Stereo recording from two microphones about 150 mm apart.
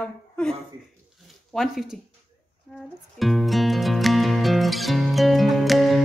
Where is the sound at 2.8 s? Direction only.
Centre (ahead or behind).